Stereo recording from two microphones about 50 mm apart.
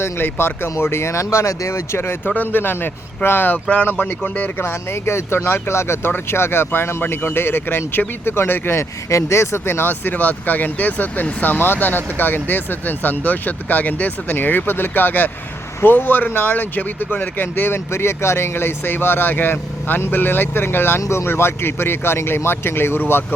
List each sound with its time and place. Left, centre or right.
0.0 s speech: left
2.3 s speech: left
5.0 s speech: left
9.0 s speech: left
21.0 s speech: left